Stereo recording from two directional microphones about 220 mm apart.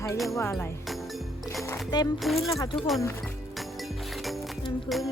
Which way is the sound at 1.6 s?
20° left (ahead or behind).